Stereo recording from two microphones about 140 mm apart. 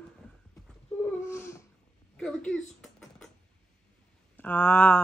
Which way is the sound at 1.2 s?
15° left (ahead or behind).